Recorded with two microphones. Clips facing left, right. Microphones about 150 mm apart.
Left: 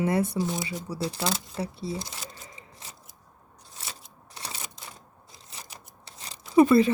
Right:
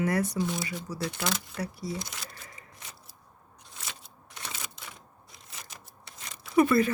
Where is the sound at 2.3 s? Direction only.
20° left (ahead or behind).